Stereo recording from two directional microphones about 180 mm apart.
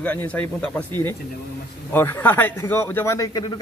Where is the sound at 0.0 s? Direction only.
10° left (ahead or behind).